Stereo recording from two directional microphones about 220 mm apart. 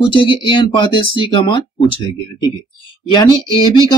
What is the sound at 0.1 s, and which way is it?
Speech, 20° left (ahead or behind).